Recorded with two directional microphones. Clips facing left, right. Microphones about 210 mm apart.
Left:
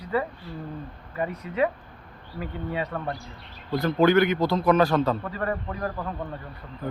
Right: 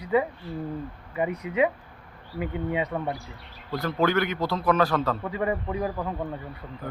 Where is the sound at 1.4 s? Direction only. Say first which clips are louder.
Even; 15° right (ahead or behind).